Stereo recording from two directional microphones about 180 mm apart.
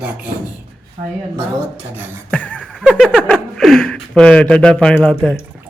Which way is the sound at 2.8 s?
Centre (ahead or behind).